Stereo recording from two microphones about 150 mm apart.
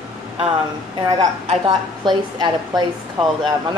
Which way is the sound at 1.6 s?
30° right (ahead or behind).